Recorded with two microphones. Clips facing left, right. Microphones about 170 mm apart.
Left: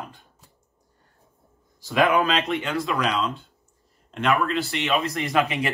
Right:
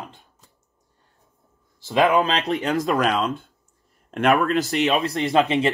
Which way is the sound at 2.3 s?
35° right (ahead or behind).